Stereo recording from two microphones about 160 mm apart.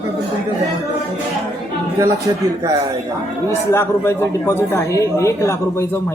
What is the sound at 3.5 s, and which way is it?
Speech, 15° left (ahead or behind).